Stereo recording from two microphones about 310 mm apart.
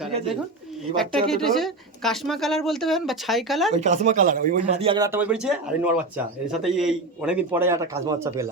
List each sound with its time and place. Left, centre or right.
1.3 s speech: centre
3.8 s speech: right